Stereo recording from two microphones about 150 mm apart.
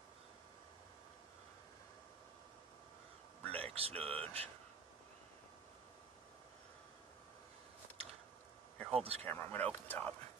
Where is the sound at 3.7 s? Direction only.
40° right (ahead or behind).